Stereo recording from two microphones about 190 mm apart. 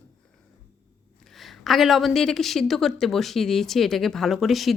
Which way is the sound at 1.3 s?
Centre (ahead or behind).